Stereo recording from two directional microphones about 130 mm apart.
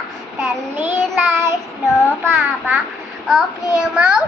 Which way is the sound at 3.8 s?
10° right (ahead or behind).